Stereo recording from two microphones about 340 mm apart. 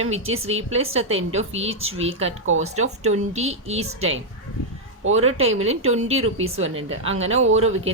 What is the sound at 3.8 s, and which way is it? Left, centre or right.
Speech, right.